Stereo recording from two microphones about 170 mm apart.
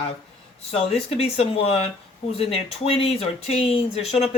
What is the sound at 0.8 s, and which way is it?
Speech, 35° left (ahead or behind).